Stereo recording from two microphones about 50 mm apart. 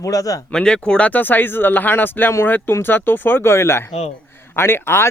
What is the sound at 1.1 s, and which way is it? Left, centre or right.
Speech, left.